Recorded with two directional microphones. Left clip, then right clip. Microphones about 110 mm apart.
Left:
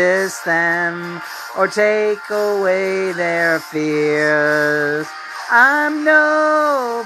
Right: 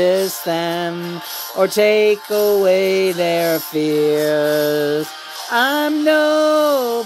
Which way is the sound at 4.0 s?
15° right (ahead or behind).